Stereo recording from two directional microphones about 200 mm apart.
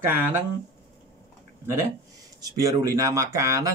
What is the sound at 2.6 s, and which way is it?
Speech, 15° right (ahead or behind).